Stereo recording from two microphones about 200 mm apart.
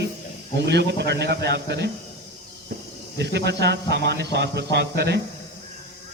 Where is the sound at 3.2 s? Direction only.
60° right (ahead or behind).